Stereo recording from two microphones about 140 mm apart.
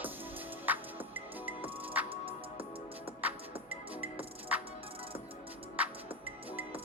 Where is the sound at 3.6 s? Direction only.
40° right (ahead or behind).